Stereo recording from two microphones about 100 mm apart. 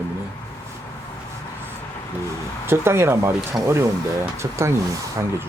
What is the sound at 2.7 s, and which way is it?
Speech, 25° right (ahead or behind).